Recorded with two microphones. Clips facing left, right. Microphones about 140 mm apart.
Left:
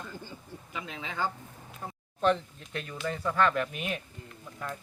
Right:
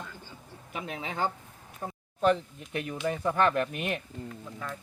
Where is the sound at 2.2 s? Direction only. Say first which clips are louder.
Right 1 dB; 10° right (ahead or behind).